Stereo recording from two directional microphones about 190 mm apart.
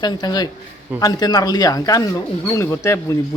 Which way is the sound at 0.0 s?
20° left (ahead or behind).